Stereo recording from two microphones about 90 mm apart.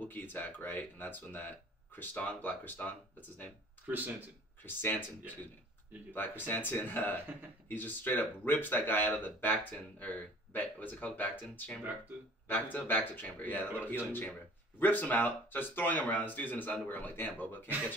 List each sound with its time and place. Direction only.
0.0 s speech: 20° left (ahead or behind)
3.8 s speech: 20° right (ahead or behind)
4.6 s speech: 20° left (ahead or behind)
6.1 s speech: 20° left (ahead or behind)